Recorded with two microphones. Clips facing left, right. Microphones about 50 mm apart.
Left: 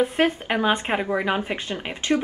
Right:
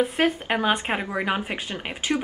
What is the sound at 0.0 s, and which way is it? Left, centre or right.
A woman's voice, centre.